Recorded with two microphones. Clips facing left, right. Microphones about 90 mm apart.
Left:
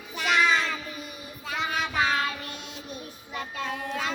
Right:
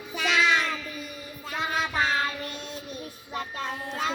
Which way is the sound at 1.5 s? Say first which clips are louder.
Even; 40° right (ahead or behind).